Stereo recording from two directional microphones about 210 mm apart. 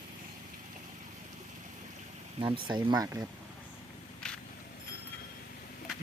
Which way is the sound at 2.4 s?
20° right (ahead or behind).